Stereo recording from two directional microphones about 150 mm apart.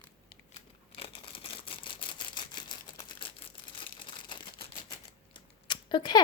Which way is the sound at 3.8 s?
35° left (ahead or behind).